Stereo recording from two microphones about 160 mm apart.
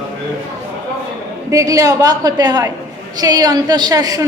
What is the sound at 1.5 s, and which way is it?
A woman's voice, 20° right (ahead or behind).